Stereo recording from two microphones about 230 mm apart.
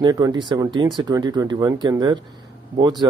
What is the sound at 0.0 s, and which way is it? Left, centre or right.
Speech, centre.